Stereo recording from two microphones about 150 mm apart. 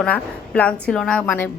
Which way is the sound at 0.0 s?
10° left (ahead or behind).